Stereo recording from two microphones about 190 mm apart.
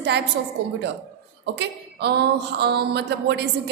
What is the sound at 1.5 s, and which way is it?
A woman's voice, 60° right (ahead or behind).